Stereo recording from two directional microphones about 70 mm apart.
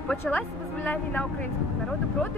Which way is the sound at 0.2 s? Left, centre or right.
Left.